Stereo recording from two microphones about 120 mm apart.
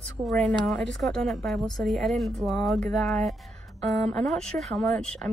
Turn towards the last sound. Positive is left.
turn(degrees=5)  # may be behind; listen again after turning